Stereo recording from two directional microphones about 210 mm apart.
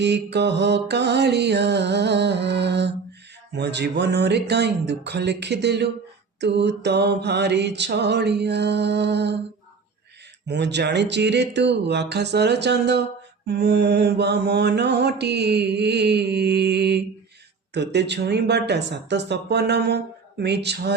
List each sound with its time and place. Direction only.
0.0 s mantra: 55° right (ahead or behind)
10.4 s speech: 55° right (ahead or behind)
13.5 s mantra: 50° right (ahead or behind)